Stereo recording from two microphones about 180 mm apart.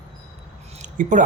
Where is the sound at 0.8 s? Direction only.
45° right (ahead or behind).